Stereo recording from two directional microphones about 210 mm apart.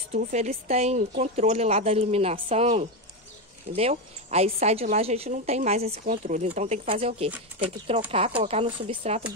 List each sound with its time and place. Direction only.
0.1 s a woman's voice: 35° right (ahead or behind)